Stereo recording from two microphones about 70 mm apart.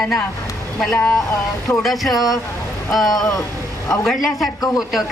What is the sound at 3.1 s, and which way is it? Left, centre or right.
Speech, left.